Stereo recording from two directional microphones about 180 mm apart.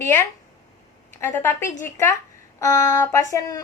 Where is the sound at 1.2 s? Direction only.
10° left (ahead or behind).